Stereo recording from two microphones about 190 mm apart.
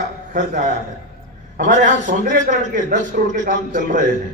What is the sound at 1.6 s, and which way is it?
A man's voice, 40° right (ahead or behind).